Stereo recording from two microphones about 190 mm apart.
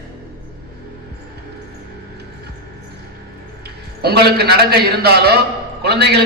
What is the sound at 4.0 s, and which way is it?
A man's voice, 60° right (ahead or behind).